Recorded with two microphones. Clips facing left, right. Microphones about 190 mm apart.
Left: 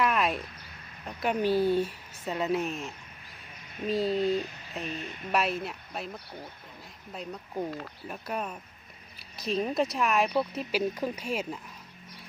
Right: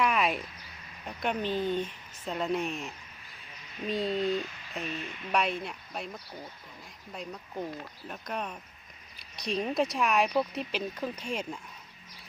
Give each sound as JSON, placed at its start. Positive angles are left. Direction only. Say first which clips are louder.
{"t": 0.0, "sound": "a sound", "louder": "left 1 dB", "side_deg": 0}
{"t": 1.0, "sound": "speech", "louder": "left 4 dB", "side_deg": 5}
{"t": 5.0, "sound": "speech", "louder": "left 2 dB", "side_deg": 45}
{"t": 5.3, "sound": "speech", "louder": "left 1 dB", "side_deg": 5}
{"t": 7.6, "sound": "speech", "louder": "left 3 dB", "side_deg": 5}